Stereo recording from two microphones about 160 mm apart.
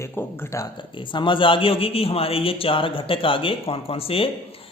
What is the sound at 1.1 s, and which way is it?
A man's voice, 30° left (ahead or behind).